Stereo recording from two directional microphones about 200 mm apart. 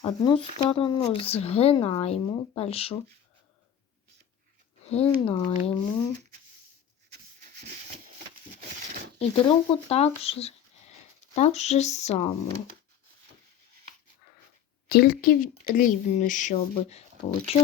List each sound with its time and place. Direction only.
0.0 s speech: 20° left (ahead or behind)
4.9 s speech: 30° left (ahead or behind)
7.1 s rub: 50° right (ahead or behind)
9.1 s speech: 30° left (ahead or behind)
14.8 s speech: 50° left (ahead or behind); by 17.6 s 30° left (ahead or behind)